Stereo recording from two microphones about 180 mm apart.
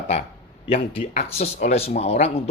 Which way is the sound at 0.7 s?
35° left (ahead or behind).